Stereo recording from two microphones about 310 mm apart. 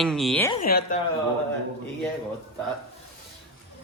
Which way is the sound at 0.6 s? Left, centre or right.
Left.